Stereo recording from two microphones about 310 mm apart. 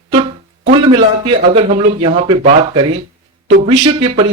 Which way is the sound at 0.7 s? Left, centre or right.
Centre.